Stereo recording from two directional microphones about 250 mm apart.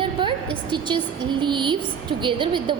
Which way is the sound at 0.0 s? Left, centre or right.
Centre.